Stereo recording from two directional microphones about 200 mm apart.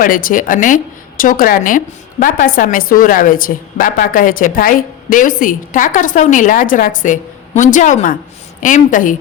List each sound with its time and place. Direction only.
0.0 s a woman's voice: 45° left (ahead or behind)